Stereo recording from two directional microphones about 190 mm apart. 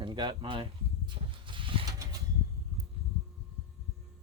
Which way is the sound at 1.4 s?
25° right (ahead or behind).